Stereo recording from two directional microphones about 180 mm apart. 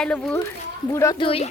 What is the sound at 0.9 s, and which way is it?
Speech, 15° left (ahead or behind).